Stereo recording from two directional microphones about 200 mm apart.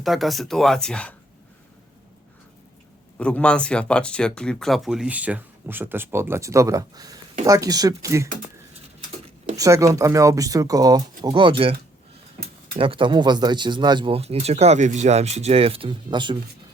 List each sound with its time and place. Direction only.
0.0 s speech: centre (ahead or behind)
3.2 s speech: 5° left (ahead or behind); by 8.3 s 15° right (ahead or behind)
9.6 s speech: 15° right (ahead or behind)